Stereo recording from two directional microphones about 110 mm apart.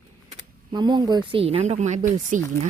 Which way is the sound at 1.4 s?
65° right (ahead or behind).